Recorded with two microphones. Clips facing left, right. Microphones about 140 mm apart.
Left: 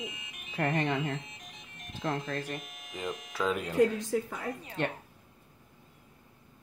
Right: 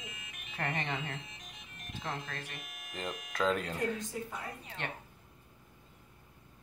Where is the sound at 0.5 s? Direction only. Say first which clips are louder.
Left 7 dB; 35° left (ahead or behind).